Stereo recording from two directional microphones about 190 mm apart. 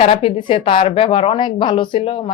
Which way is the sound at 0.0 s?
30° left (ahead or behind).